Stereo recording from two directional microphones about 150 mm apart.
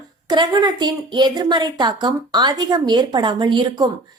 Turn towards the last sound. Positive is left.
turn(degrees=-25)  # may be behind; listen again after turning